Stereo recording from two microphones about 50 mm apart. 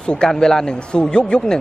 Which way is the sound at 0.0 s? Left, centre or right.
Centre.